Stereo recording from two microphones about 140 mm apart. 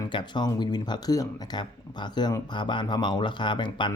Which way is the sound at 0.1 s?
35° left (ahead or behind).